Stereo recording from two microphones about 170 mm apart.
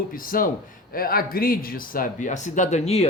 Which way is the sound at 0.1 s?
55° left (ahead or behind).